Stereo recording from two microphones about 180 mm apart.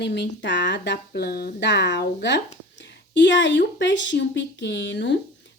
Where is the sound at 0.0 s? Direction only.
75° left (ahead or behind).